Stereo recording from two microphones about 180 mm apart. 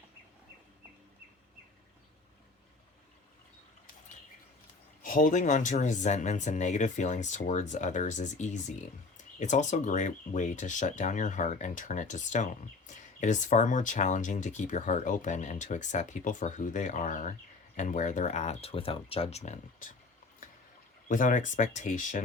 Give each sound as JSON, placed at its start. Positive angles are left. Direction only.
{"t": 5.0, "sound": "speech", "side_deg": 50}
{"t": 21.1, "sound": "speech", "side_deg": 45}